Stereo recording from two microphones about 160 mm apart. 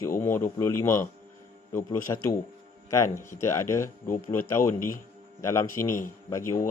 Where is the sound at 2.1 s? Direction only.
25° left (ahead or behind).